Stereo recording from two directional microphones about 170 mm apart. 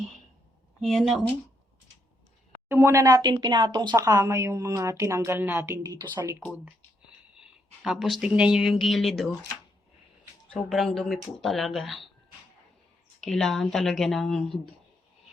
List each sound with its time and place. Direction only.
0.8 s speech: centre (ahead or behind)
2.6 s speech: 15° right (ahead or behind)
7.3 s speech: 5° right (ahead or behind)
10.5 s speech: centre (ahead or behind)
13.2 s speech: 5° left (ahead or behind)